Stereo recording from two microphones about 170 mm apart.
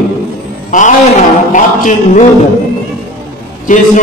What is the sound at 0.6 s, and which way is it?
A man's voice, 50° left (ahead or behind).